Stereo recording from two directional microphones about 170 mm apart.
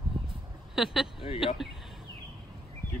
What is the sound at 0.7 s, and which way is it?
Speech, centre (ahead or behind).